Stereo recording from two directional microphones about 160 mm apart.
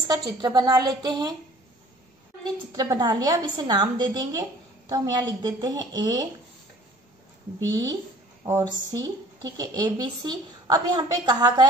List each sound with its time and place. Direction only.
0.1 s a woman's voice: 25° right (ahead or behind)
2.7 s a woman's voice: 25° right (ahead or behind)
8.5 s a woman's voice: 20° right (ahead or behind)